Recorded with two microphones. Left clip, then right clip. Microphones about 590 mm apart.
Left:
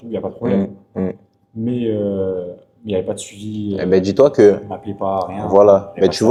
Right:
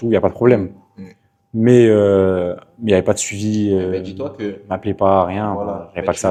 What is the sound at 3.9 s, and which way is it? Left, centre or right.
Speech, left.